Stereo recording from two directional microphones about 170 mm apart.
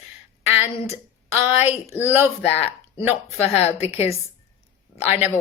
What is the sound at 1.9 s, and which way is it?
Speech, 10° right (ahead or behind).